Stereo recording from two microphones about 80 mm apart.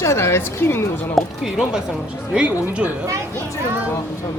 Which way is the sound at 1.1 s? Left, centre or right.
Centre.